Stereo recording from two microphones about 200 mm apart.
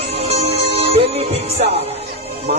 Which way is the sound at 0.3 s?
30° right (ahead or behind).